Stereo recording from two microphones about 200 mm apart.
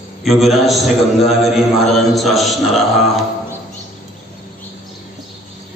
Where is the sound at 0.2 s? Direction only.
Centre (ahead or behind).